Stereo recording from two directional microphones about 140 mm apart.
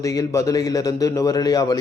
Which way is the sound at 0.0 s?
25° left (ahead or behind).